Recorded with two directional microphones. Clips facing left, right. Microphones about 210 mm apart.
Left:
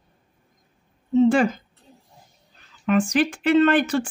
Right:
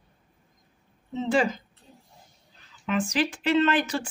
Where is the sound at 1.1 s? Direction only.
50° left (ahead or behind).